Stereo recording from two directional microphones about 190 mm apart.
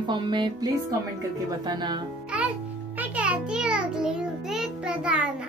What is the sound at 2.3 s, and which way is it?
Music, 5° right (ahead or behind).